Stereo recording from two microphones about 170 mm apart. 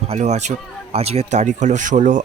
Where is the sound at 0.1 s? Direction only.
40° right (ahead or behind).